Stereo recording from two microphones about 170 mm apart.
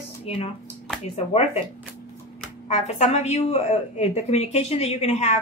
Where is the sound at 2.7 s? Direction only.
40° left (ahead or behind).